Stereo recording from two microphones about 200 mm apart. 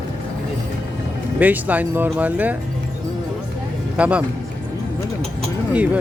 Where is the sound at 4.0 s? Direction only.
5° right (ahead or behind).